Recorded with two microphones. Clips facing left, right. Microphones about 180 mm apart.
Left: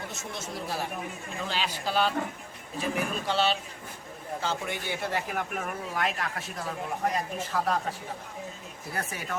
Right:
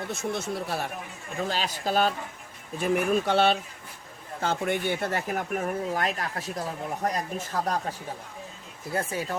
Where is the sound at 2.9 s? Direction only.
55° right (ahead or behind); by 6.6 s 35° right (ahead or behind).